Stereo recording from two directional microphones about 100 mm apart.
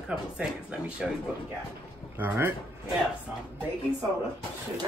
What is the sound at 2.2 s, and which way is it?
Speech, 20° right (ahead or behind).